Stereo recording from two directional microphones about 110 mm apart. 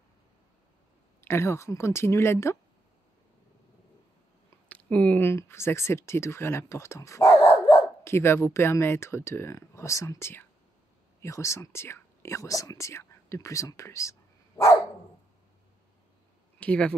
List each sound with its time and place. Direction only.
1.2 s speech: 25° left (ahead or behind)
4.6 s speech: 15° left (ahead or behind)
16.5 s speech: 10° left (ahead or behind)